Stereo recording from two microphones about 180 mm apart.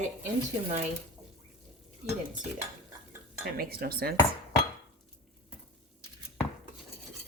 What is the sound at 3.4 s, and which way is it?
Speech, 55° right (ahead or behind).